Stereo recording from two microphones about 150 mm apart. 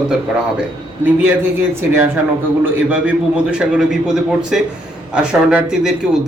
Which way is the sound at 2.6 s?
10° right (ahead or behind).